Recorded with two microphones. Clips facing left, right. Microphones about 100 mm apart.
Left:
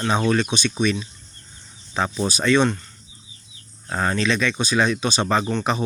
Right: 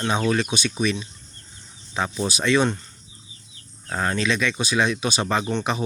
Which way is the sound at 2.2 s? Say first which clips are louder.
Left 2 dB; 5° right (ahead or behind).